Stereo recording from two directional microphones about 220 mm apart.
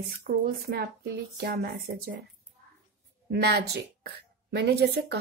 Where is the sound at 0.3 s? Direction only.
40° right (ahead or behind).